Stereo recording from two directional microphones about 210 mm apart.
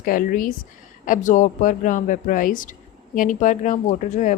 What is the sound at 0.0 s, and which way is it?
A woman's voice, 40° left (ahead or behind).